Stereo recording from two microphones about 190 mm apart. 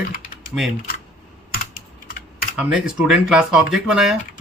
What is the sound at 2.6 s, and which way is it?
Speech, 5° right (ahead or behind).